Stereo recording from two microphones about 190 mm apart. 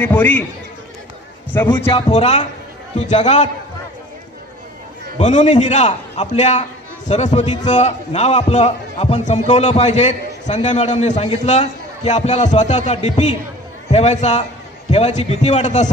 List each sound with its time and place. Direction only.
0.0 s a man's voice: 10° left (ahead or behind)
1.5 s a man's voice: 10° left (ahead or behind)
1.9 s a man's voice: 30° left (ahead or behind)
5.2 s a man's voice: 40° left (ahead or behind)